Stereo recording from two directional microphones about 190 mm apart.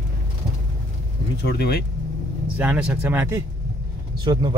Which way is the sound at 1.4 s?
60° left (ahead or behind).